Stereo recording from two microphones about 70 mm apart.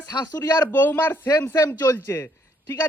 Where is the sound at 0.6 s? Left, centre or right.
Left.